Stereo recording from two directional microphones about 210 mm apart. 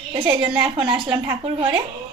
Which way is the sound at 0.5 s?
5° right (ahead or behind).